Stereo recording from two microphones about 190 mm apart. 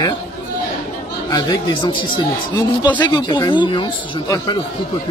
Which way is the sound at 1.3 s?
25° left (ahead or behind).